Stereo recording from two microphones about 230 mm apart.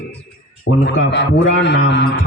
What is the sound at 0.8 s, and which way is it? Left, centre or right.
A man's voice, left.